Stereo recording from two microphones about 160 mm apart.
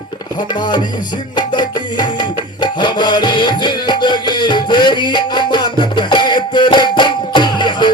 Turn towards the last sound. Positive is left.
turn(degrees=30)  # may be behind; listen again after turning